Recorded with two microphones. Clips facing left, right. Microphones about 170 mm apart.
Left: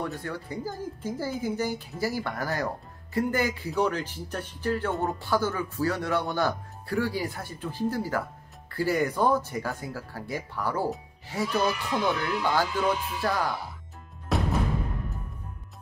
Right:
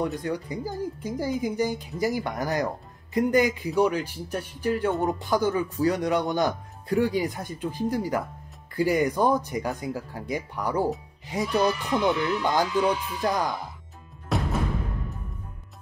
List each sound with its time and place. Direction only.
0.0 s speech: 15° right (ahead or behind)
14.3 s music: centre (ahead or behind)